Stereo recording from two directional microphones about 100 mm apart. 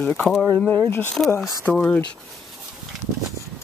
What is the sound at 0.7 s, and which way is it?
Speech, 20° left (ahead or behind).